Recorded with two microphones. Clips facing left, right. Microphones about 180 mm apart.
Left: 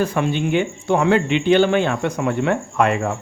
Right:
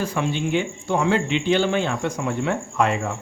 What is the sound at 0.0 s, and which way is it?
Speech, 55° left (ahead or behind).